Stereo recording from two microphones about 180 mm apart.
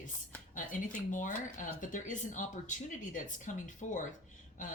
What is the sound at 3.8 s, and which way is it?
Speech, 40° left (ahead or behind).